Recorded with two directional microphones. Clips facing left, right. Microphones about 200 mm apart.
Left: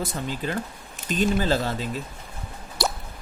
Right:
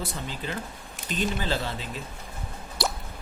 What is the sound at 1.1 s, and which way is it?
Speech, 45° left (ahead or behind).